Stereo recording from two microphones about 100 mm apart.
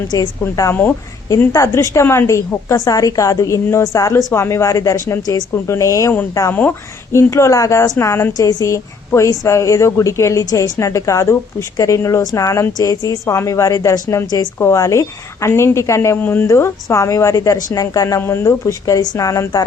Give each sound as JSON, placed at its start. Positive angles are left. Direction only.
{"t": 0.1, "sound": "a woman's voice", "side_deg": 35}
{"t": 0.7, "sound": "a woman's voice", "side_deg": 20}
{"t": 1.5, "sound": "a woman's voice", "side_deg": 30}
{"t": 6.5, "sound": "a woman's voice", "side_deg": 20}
{"t": 18.2, "sound": "a woman's voice", "side_deg": 25}